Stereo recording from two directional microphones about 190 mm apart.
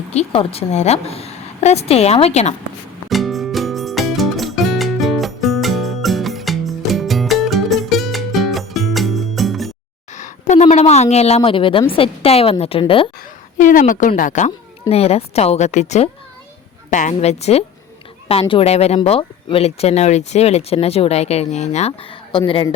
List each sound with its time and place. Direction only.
0.1 s speech: 35° left (ahead or behind)
3.1 s music: centre (ahead or behind)
10.2 s speech: 40° left (ahead or behind)
13.6 s a woman's voice: 45° left (ahead or behind); by 22.7 s 25° left (ahead or behind)